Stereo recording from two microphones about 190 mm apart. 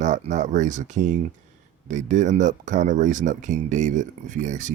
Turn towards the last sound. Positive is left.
turn(degrees=-40)  # may be behind; listen again after turning